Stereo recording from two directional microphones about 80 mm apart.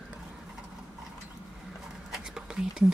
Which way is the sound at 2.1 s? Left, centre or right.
Centre.